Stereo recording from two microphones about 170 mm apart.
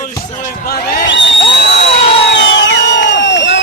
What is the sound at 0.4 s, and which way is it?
Basketball bounce, 55° left (ahead or behind).